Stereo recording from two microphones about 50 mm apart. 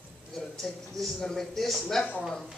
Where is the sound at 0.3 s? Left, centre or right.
Centre.